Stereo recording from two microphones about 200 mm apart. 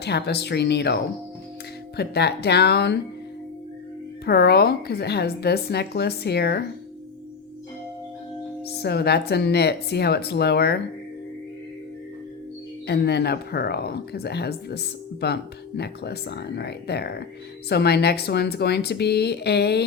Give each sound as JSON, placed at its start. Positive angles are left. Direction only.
{"t": 0.0, "sound": "speech", "side_deg": 55}
{"t": 2.0, "sound": "speech", "side_deg": 55}
{"t": 4.3, "sound": "a woman's voice", "side_deg": 55}
{"t": 8.8, "sound": "speech", "side_deg": 55}
{"t": 12.9, "sound": "speech", "side_deg": 55}